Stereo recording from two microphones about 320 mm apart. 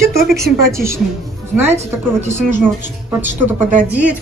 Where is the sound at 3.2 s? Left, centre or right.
Centre.